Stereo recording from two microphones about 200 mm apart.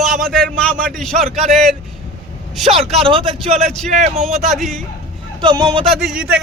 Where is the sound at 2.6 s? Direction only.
30° right (ahead or behind).